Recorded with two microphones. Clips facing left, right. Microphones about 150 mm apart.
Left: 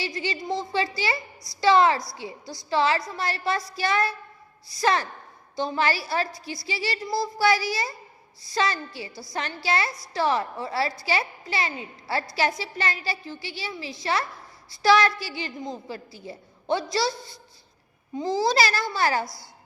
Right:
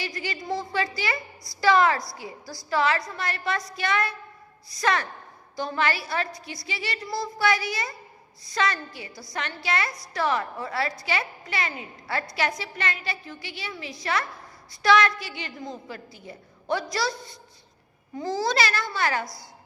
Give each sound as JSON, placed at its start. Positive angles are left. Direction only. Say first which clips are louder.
{"t": 0.0, "sound": "a woman's voice", "louder": "left 3 dB", "side_deg": 25}